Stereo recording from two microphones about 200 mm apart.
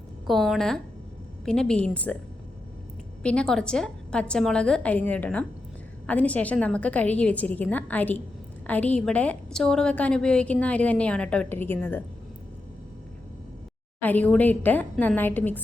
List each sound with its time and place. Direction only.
0.3 s a woman's voice: centre (ahead or behind)
3.2 s a woman's voice: 5° left (ahead or behind)
14.0 s a woman's voice: 10° left (ahead or behind)